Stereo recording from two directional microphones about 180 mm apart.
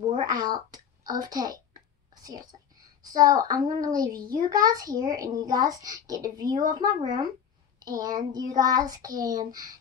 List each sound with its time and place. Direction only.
0.1 s a woman's voice: 25° right (ahead or behind)
3.0 s a child's voice: 20° right (ahead or behind)